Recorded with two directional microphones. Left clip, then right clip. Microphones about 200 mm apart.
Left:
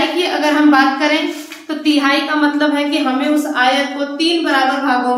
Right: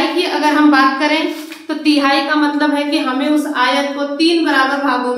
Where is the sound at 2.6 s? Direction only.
5° left (ahead or behind).